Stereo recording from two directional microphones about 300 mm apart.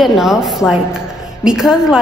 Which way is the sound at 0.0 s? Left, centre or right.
Centre.